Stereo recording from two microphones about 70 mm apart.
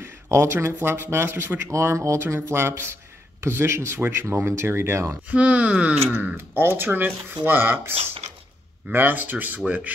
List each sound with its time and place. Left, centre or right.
0.0 s a sound: right
0.7 s speech: right
5.3 s speech: centre
6.3 s speech: right
8.9 s speech: right